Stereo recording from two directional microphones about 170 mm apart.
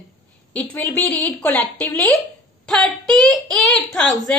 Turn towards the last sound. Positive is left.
turn(degrees=5)  # may be behind; listen again after turning